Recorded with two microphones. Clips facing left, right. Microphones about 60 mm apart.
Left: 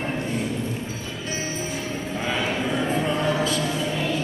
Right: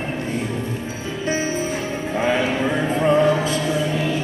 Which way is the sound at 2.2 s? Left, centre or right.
Right.